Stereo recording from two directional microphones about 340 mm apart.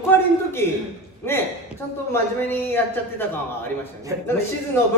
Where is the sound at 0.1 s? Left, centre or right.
Centre.